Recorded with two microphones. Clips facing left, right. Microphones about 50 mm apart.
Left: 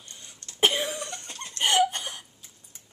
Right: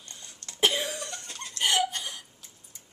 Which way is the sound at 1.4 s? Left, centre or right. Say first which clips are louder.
Left 4 dB; left.